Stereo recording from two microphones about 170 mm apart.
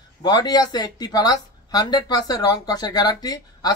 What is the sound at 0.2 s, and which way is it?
Speech, 25° left (ahead or behind).